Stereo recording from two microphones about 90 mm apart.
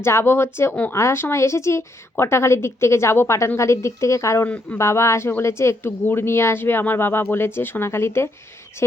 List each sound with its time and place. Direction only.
0.0 s a woman's voice: 30° left (ahead or behind)
4.4 s speech: 15° left (ahead or behind)
4.8 s a woman's voice: 30° left (ahead or behind)